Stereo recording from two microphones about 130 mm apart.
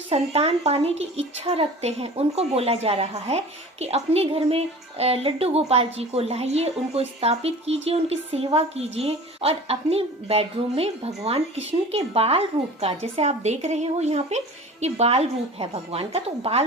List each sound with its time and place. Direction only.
0.1 s a woman's voice: 50° right (ahead or behind)